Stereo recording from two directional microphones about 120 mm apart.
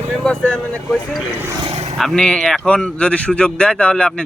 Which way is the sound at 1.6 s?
55° right (ahead or behind).